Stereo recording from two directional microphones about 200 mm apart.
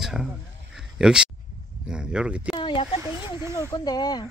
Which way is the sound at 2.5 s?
25° left (ahead or behind).